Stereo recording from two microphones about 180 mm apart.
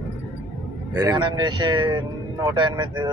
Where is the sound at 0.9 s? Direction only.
20° right (ahead or behind).